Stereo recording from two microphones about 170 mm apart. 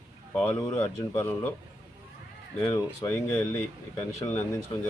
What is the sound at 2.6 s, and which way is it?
Speech, 20° left (ahead or behind).